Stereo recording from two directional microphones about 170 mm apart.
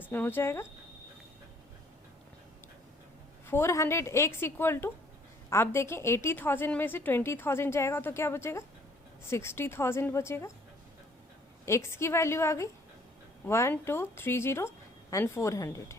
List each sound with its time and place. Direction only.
0.0 s a woman's voice: 10° left (ahead or behind)
3.4 s a woman's voice: 15° left (ahead or behind)
11.6 s a woman's voice: 15° left (ahead or behind)